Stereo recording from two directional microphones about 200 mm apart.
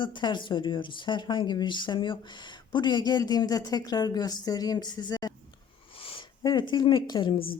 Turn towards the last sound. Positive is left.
turn(degrees=25)  # may be behind; listen again after turning